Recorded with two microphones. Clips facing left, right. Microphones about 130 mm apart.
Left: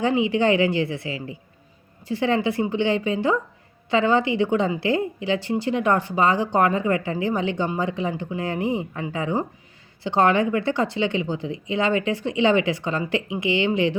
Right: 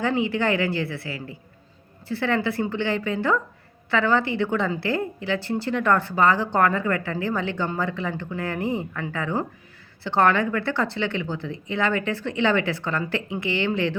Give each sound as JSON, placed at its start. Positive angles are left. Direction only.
{"t": 0.0, "sound": "a woman's voice", "side_deg": 20}